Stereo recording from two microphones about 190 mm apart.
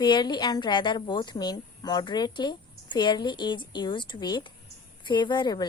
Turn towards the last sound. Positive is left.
turn(degrees=20)  # may be behind; listen again after turning